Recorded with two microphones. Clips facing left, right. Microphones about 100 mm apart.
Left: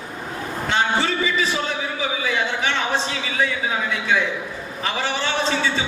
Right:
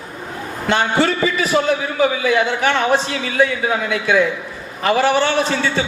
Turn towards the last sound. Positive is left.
turn(degrees=-65)  # may be behind; listen again after turning